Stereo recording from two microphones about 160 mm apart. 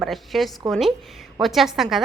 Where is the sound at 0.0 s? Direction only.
Centre (ahead or behind).